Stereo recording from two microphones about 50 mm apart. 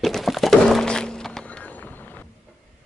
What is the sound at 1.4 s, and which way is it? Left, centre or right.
Vehicle, left.